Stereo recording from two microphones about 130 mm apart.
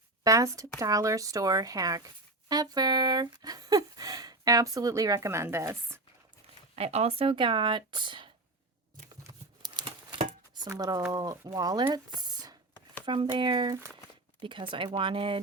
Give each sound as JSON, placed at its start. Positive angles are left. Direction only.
{"t": 0.3, "sound": "speech", "side_deg": -25}
{"t": 6.7, "sound": "speech", "side_deg": -50}
{"t": 9.6, "sound": "a sound", "side_deg": -35}
{"t": 10.5, "sound": "speech", "side_deg": -30}